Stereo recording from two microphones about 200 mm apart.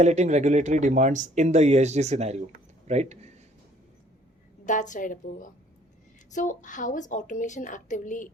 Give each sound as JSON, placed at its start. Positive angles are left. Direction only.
{"t": 0.0, "sound": "speech", "side_deg": -35}
{"t": 4.6, "sound": "a woman's voice", "side_deg": 40}